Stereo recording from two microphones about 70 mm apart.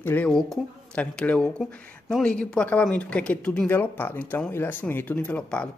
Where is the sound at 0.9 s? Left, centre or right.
Centre.